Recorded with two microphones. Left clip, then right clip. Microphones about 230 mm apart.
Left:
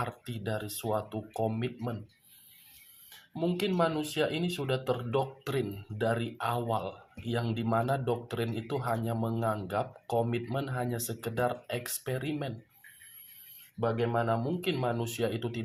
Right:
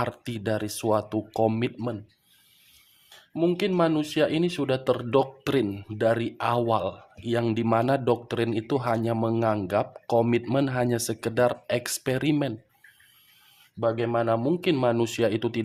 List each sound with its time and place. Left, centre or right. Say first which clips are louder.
0.0 s speech: right 7 dB; right
3.3 s speech: right 6 dB; right
13.7 s speech: right 5 dB; right